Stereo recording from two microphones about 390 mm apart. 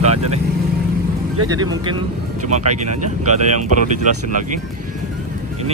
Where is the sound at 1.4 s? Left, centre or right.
Centre.